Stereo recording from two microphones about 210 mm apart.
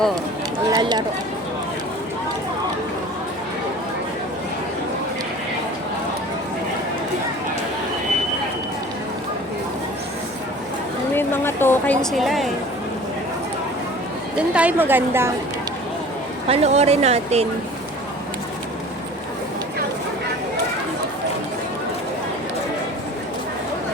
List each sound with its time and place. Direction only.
0.7 s speech: 20° right (ahead or behind)
11.1 s a sound: 10° left (ahead or behind)
12.1 s a woman's voice: centre (ahead or behind)
14.5 s a woman's voice: 5° right (ahead or behind)
16.5 s speech: 30° right (ahead or behind)